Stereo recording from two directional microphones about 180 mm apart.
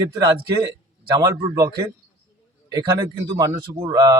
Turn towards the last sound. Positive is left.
turn(degrees=-20)  # may be behind; listen again after turning